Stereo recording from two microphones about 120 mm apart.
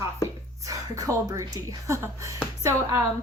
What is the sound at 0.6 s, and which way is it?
A woman's voice, 30° right (ahead or behind).